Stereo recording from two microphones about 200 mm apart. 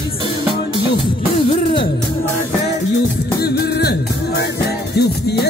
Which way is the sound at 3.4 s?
50° left (ahead or behind).